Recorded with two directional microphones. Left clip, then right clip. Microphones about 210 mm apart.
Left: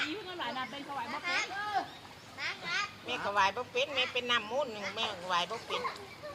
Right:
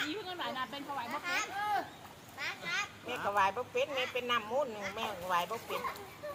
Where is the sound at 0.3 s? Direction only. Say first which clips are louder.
Left 1 dB; 45° right (ahead or behind).